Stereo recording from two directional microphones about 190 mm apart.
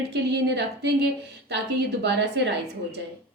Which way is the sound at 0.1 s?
65° right (ahead or behind).